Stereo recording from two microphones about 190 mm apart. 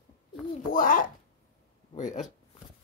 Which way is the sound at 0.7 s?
45° left (ahead or behind).